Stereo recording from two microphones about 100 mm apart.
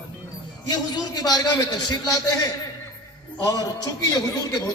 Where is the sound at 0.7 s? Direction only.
45° left (ahead or behind).